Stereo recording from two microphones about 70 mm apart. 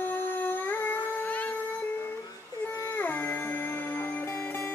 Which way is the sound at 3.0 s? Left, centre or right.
Left.